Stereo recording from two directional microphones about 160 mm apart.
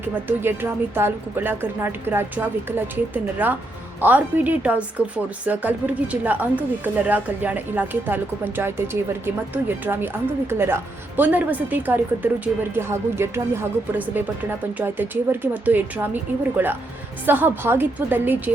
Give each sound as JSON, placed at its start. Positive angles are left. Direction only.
{"t": 0.0, "sound": "a woman's voice", "side_deg": -10}
{"t": 14.8, "sound": "a woman's voice", "side_deg": -10}